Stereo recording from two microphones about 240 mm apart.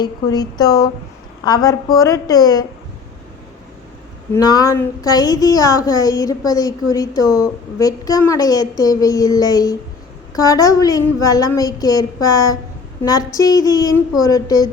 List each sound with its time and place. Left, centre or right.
0.0 s speech: centre
4.4 s speech: centre